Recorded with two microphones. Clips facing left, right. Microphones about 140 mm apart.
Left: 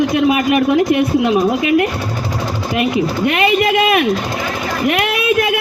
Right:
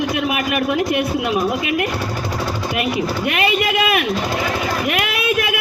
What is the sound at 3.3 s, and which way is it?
Speech, 30° left (ahead or behind).